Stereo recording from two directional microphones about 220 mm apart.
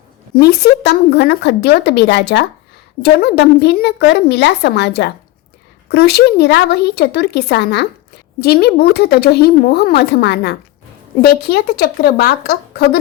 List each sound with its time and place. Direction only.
0.3 s a woman's voice: 45° left (ahead or behind)